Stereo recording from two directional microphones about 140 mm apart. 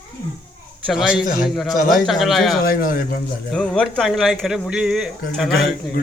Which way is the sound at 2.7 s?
90° left.